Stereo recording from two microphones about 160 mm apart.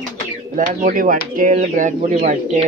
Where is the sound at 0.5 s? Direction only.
55° right (ahead or behind).